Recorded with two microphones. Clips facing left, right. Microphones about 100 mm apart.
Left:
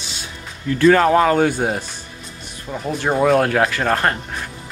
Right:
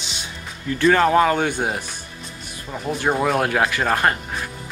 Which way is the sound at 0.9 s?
35° left (ahead or behind).